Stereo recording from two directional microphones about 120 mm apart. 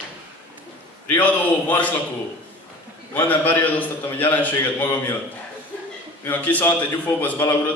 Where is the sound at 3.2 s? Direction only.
15° left (ahead or behind).